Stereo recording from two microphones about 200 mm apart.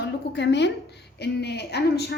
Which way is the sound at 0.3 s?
60° left (ahead or behind).